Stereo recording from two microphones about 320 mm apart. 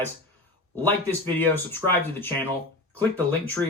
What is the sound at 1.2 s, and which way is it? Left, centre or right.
Speech, centre.